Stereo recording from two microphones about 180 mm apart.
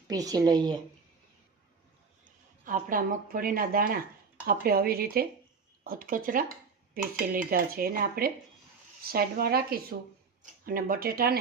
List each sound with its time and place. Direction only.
0.1 s speech: 20° right (ahead or behind)
2.2 s speech: 45° right (ahead or behind)